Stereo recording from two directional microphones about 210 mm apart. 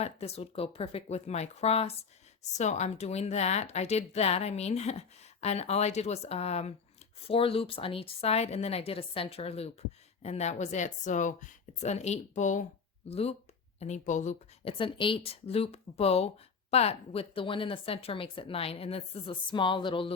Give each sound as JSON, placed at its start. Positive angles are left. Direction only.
{"t": 0.0, "sound": "a woman's voice", "side_deg": 30}